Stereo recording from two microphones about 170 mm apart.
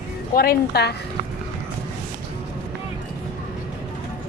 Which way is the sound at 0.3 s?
65° left (ahead or behind).